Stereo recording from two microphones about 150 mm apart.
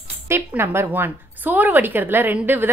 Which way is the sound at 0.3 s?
15° right (ahead or behind).